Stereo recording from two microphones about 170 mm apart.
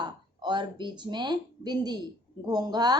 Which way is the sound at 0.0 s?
25° right (ahead or behind).